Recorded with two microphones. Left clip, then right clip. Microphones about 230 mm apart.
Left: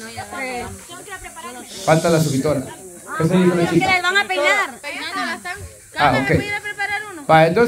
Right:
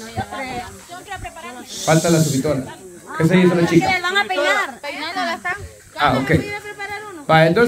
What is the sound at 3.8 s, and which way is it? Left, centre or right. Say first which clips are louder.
Speech: left 1 dB; centre.